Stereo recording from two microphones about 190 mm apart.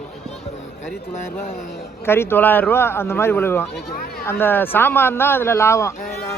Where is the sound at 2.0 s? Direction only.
10° left (ahead or behind).